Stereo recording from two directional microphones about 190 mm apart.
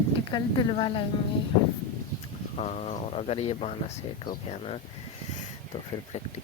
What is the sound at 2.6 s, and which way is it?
Speech, 35° left (ahead or behind).